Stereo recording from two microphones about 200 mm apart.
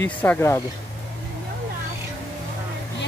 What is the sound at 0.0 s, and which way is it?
Speech, 10° left (ahead or behind).